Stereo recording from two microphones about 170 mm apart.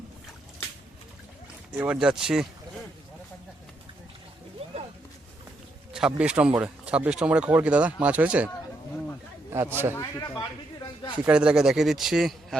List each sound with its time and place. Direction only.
1.7 s speech: 5° right (ahead or behind)
5.9 s speech: 5° right (ahead or behind)
9.5 s speech: 15° right (ahead or behind)
9.9 s speech: 15° left (ahead or behind)
11.3 s speech: 5° right (ahead or behind)